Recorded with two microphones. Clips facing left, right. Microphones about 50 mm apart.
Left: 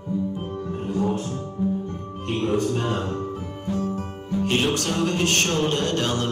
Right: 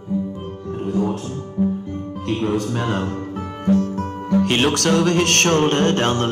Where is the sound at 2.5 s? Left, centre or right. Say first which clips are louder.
Left 1 dB; right.